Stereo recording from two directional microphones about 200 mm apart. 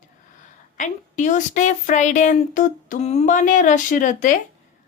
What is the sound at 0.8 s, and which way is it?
A woman's voice, 40° left (ahead or behind).